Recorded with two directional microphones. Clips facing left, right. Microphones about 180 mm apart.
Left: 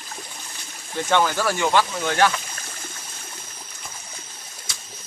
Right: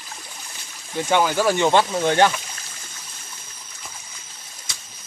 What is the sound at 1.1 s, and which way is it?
Speech, 10° right (ahead or behind).